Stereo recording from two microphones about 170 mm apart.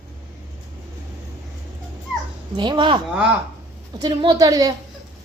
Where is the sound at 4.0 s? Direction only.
25° right (ahead or behind).